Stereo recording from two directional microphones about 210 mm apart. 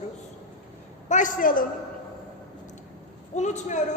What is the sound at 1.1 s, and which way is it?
Speech, 35° left (ahead or behind).